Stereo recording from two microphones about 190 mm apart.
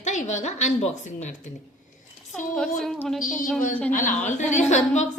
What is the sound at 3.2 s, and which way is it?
A woman's voice, 45° left (ahead or behind).